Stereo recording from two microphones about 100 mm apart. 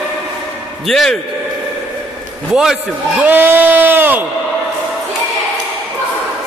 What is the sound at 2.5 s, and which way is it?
Speech, 5° right (ahead or behind).